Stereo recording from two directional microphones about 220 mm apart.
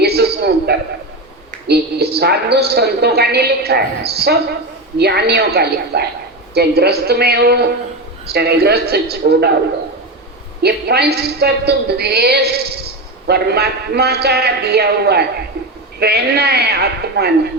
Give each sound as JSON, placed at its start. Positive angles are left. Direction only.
{"t": 0.0, "sound": "a sound", "side_deg": -45}
{"t": 1.6, "sound": "a woman's voice", "side_deg": -45}
{"t": 10.6, "sound": "a woman's voice", "side_deg": -45}